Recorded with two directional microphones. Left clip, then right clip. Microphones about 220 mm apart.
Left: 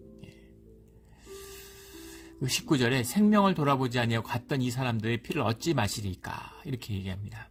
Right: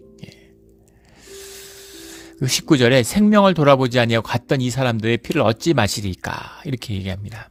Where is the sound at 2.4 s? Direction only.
35° right (ahead or behind).